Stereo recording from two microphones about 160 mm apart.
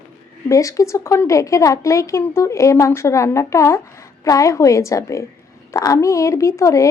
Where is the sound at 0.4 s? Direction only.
20° left (ahead or behind).